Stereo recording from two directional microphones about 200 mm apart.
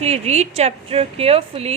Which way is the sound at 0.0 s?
35° right (ahead or behind).